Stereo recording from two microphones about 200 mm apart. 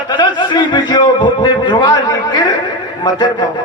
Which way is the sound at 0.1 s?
20° left (ahead or behind).